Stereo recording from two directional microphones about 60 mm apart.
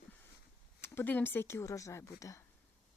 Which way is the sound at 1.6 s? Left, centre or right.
Left.